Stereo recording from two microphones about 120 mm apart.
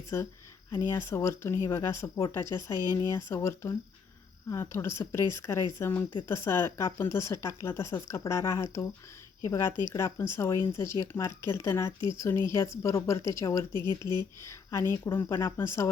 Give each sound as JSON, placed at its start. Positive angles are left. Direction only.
{"t": 0.1, "sound": "speech", "side_deg": 20}